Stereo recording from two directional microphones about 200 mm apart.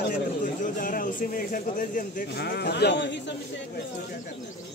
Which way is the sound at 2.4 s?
55° left (ahead or behind).